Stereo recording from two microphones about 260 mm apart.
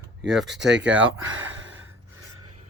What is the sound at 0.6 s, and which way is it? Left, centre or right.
Speech, right.